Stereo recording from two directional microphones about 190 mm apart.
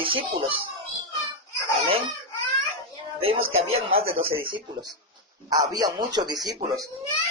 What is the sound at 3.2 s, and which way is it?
Speech, 30° right (ahead or behind).